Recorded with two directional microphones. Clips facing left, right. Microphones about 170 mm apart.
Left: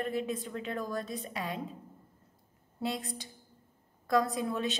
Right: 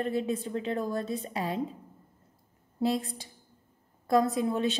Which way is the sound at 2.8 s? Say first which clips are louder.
Right 7 dB; 30° right (ahead or behind).